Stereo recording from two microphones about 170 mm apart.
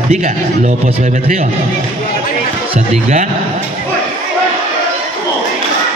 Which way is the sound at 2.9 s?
45° right (ahead or behind).